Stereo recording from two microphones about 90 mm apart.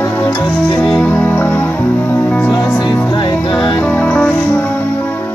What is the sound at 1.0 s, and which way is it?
Music, 20° left (ahead or behind).